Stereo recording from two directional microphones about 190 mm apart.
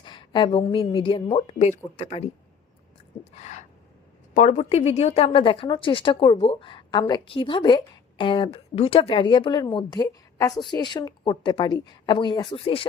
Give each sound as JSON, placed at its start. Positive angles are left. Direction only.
{"t": 0.0, "sound": "speech", "side_deg": 25}
{"t": 3.3, "sound": "speech", "side_deg": 35}